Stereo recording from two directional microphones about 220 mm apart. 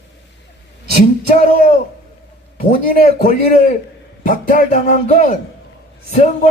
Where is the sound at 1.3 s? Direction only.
30° left (ahead or behind).